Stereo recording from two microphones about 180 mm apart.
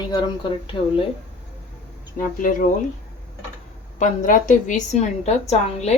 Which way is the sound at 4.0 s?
45° left (ahead or behind).